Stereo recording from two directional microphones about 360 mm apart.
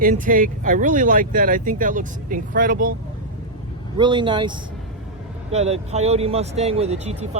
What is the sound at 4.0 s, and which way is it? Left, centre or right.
Speech, centre.